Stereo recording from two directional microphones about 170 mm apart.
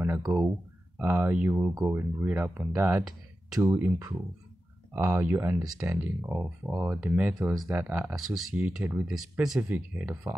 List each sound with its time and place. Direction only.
0.0 s speech: 15° right (ahead or behind)